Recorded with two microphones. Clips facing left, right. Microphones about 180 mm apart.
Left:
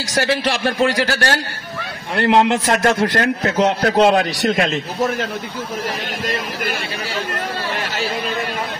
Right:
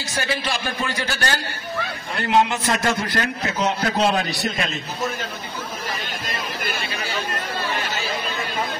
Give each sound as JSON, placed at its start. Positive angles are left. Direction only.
{"t": 0.1, "sound": "a man's voice", "side_deg": 75}
{"t": 2.1, "sound": "a man's voice", "side_deg": 75}